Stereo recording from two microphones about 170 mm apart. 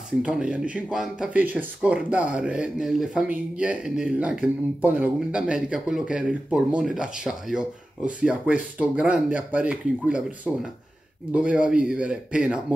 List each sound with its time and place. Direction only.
0.2 s speech: 5° right (ahead or behind)